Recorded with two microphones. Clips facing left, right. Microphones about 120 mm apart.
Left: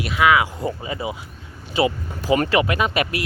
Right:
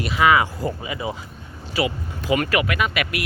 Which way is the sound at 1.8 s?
30° left (ahead or behind).